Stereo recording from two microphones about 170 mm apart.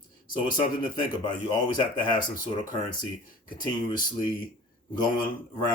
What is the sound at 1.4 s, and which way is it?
Speech, 25° left (ahead or behind).